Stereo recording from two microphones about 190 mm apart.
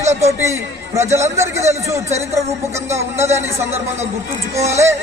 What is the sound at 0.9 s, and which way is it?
Speech, 15° right (ahead or behind).